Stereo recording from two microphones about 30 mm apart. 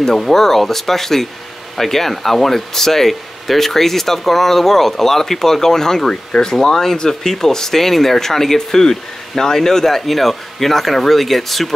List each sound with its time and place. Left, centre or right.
0.0 s speech: centre